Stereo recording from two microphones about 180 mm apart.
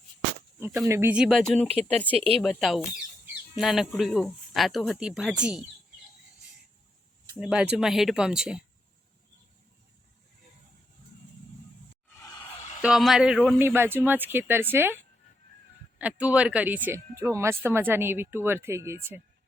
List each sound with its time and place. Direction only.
0.9 s speech: 10° right (ahead or behind)
1.6 s speech: 35° right (ahead or behind)
2.4 s speech: centre (ahead or behind)
7.3 s speech: 5° right (ahead or behind)
12.1 s a sound: 15° left (ahead or behind)
12.8 s speech: centre (ahead or behind)
13.6 s speech: 15° right (ahead or behind)
16.0 s speech: 5° right (ahead or behind)